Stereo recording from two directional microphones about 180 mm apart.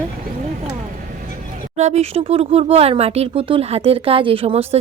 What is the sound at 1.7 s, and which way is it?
Speech, 35° right (ahead or behind).